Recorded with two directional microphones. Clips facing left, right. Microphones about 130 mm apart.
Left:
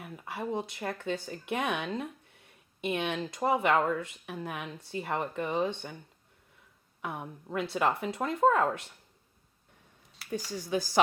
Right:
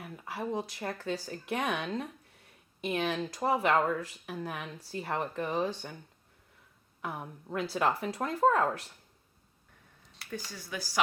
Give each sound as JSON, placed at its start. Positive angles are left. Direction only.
{"t": 0.0, "sound": "speech", "side_deg": 0}
{"t": 7.0, "sound": "speech", "side_deg": 0}
{"t": 10.2, "sound": "speech", "side_deg": 25}